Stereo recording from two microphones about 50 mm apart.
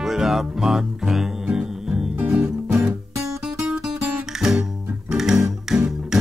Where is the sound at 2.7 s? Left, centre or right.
Right.